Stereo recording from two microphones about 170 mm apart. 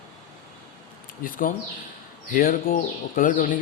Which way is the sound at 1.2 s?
55° left (ahead or behind).